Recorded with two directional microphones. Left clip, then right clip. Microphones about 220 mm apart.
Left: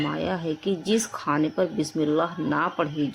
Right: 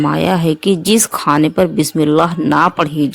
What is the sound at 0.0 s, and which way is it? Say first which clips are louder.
Speech: right 13 dB; 50° right (ahead or behind).